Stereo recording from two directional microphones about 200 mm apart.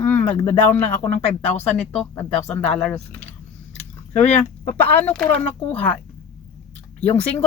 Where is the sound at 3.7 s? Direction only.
35° left (ahead or behind).